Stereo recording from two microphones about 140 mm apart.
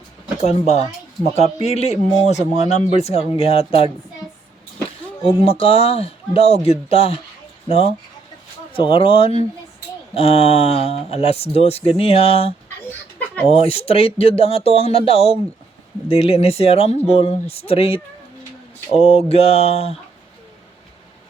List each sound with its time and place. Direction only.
0.4 s speech: 50° left (ahead or behind)
5.2 s speech: 45° left (ahead or behind)